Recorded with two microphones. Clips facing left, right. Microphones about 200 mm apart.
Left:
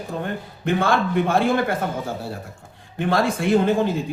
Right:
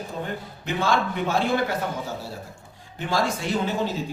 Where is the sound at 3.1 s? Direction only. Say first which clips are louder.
Left 5 dB; 60° left (ahead or behind).